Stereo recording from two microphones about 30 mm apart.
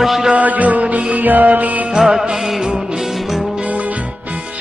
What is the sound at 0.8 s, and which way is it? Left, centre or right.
Music, right.